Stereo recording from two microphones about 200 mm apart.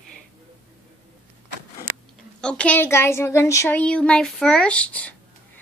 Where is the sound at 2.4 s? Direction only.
5° left (ahead or behind).